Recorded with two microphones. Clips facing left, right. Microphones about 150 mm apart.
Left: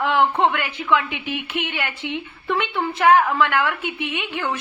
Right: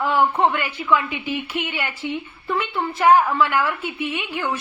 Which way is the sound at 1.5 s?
60° left (ahead or behind).